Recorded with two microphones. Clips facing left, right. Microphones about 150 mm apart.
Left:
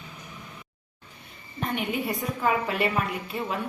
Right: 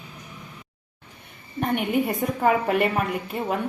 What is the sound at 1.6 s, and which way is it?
A woman's voice, 55° right (ahead or behind).